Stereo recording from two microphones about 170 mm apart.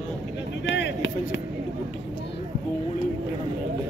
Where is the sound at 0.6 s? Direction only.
90° left.